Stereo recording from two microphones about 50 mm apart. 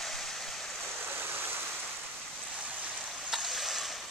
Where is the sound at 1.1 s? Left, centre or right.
Right.